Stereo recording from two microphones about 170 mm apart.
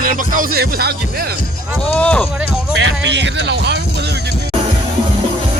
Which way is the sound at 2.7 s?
90° right.